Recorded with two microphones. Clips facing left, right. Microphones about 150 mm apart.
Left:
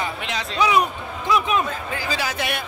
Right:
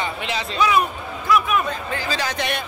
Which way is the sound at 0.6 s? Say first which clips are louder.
Even; 15° left (ahead or behind).